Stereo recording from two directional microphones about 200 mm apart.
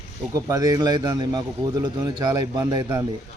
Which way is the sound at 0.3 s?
15° right (ahead or behind).